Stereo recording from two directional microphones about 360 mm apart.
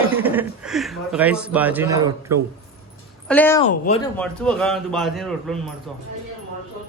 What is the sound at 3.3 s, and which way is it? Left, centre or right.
Speech, centre.